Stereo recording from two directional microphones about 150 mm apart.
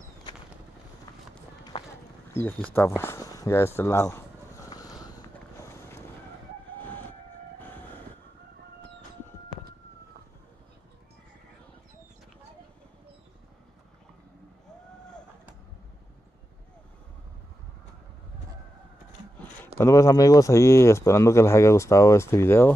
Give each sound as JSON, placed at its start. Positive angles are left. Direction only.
{"t": 2.3, "sound": "speech", "side_deg": 15}
{"t": 3.0, "sound": "a sound", "side_deg": 20}
{"t": 6.8, "sound": "vehicle", "side_deg": 10}
{"t": 19.8, "sound": "speech", "side_deg": 20}